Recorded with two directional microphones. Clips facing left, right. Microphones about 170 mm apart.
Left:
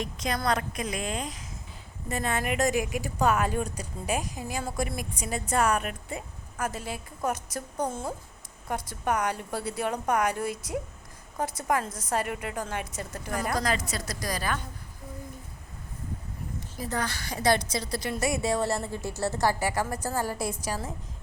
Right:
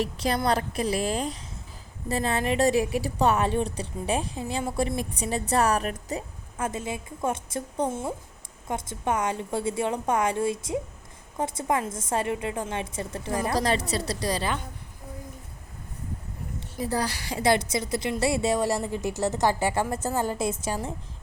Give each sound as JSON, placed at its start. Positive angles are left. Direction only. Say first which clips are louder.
{"t": 0.0, "sound": "a woman's voice", "louder": "right 4 dB", "side_deg": -30}
{"t": 6.6, "sound": "a woman's voice", "louder": "right 3 dB", "side_deg": -25}
{"t": 16.8, "sound": "a woman's voice", "louder": "right 4 dB", "side_deg": -30}